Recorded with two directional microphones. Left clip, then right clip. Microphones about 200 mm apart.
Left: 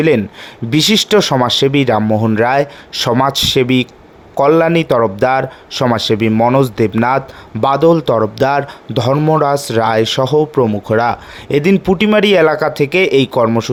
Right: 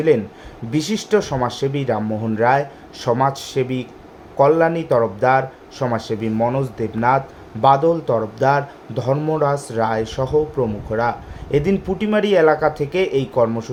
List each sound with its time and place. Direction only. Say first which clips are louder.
0.7 s speech: left 8 dB; 40° left (ahead or behind)